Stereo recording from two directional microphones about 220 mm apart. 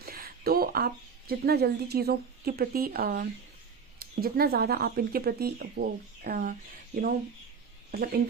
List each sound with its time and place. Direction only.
0.0 s speech: 40° right (ahead or behind)